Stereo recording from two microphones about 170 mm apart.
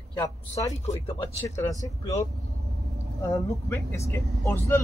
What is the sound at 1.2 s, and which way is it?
Speech, 15° left (ahead or behind).